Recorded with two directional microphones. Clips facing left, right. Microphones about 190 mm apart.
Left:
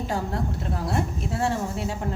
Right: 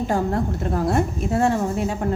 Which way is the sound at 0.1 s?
50° right (ahead or behind).